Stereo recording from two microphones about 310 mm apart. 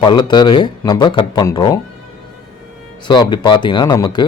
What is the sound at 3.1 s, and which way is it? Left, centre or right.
A man's voice, centre.